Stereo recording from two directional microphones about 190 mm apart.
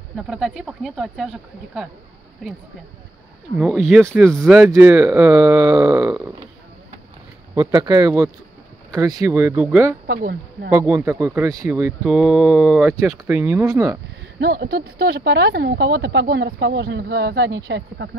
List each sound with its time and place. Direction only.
0.3 s speech: centre (ahead or behind)
4.4 s speech: 10° right (ahead or behind)
7.5 s speech: 20° right (ahead or behind)
10.0 s speech: 55° right (ahead or behind)
10.7 s speech: 15° right (ahead or behind)
14.4 s speech: 55° right (ahead or behind)